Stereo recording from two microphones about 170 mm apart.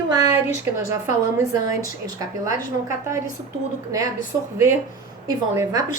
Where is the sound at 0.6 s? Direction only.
15° right (ahead or behind).